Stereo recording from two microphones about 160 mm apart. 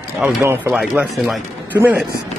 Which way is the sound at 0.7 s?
5° right (ahead or behind).